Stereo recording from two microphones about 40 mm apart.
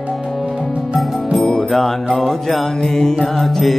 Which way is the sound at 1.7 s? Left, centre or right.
Centre.